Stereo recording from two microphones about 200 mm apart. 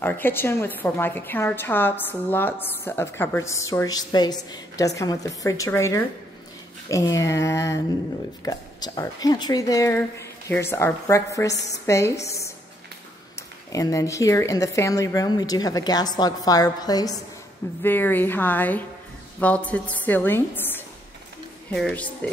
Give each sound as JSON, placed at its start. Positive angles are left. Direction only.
{"t": 0.0, "sound": "a woman's voice", "side_deg": 10}
{"t": 11.5, "sound": "a woman's voice", "side_deg": 60}
{"t": 11.8, "sound": "a woman's voice", "side_deg": 15}
{"t": 13.4, "sound": "a woman's voice", "side_deg": 15}